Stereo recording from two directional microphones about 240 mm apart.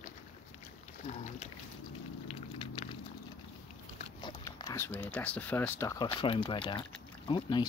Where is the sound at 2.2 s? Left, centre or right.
Left.